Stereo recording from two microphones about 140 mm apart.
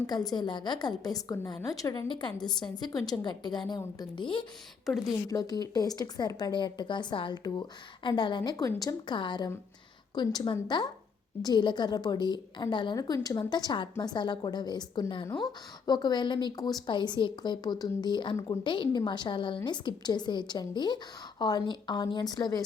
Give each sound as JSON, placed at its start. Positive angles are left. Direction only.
{"t": 0.1, "sound": "a woman's voice", "side_deg": 30}